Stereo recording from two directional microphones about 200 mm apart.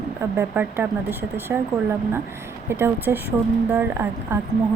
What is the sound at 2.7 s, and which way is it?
Speech, 10° right (ahead or behind).